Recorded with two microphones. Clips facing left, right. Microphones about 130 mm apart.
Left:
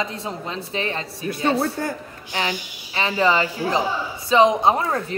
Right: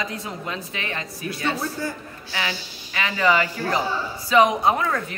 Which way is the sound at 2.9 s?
35° left (ahead or behind).